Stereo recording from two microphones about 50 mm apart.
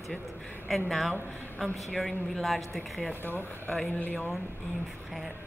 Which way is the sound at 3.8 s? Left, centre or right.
Left.